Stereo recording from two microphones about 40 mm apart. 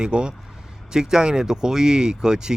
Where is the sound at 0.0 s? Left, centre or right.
Right.